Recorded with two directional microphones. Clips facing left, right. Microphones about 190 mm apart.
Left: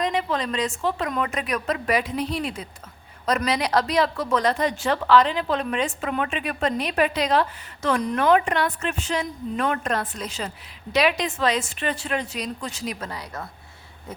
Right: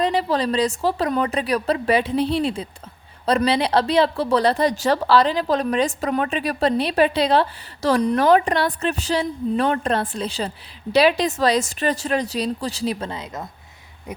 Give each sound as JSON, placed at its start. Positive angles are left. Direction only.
{"t": 0.0, "sound": "a woman's voice", "side_deg": -35}